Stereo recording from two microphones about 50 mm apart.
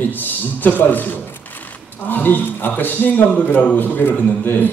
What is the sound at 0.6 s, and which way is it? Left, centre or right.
Speech, left.